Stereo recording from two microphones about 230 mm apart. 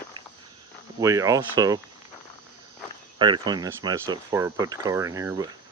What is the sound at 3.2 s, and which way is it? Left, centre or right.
Speech, centre.